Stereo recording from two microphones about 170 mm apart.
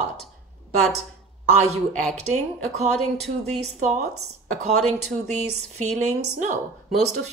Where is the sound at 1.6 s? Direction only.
40° right (ahead or behind).